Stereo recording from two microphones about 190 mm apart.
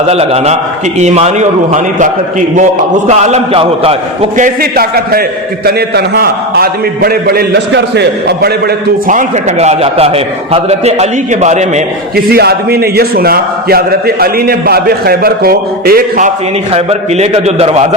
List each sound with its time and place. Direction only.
0.1 s a man's voice: 35° right (ahead or behind)
3.1 s a man's voice: 35° right (ahead or behind)
4.4 s a man's voice: 50° right (ahead or behind)
9.0 s a man's voice: 40° right (ahead or behind)
12.1 s a man's voice: 55° right (ahead or behind)
16.7 s a man's voice: 35° right (ahead or behind)